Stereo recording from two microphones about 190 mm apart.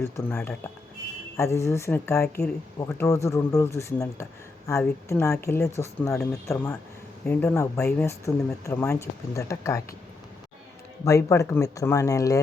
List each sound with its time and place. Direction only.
0.0 s speech: 10° left (ahead or behind)
11.0 s speech: 15° left (ahead or behind)